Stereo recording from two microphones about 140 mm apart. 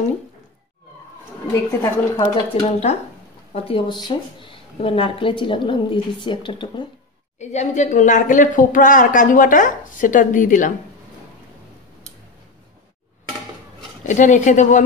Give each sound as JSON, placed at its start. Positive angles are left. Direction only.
{"t": 1.5, "sound": "a woman's voice", "side_deg": 25}
{"t": 2.5, "sound": "speech", "side_deg": 45}
{"t": 7.3, "sound": "speech", "side_deg": 55}
{"t": 14.0, "sound": "speech", "side_deg": 60}